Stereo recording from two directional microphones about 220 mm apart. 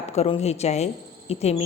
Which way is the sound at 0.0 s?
30° left (ahead or behind).